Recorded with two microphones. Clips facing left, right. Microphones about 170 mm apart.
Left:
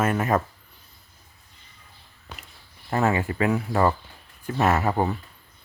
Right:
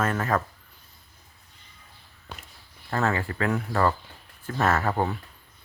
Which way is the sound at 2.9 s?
15° left (ahead or behind).